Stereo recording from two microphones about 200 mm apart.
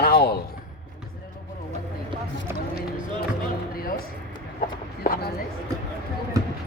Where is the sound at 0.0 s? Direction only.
50° left (ahead or behind).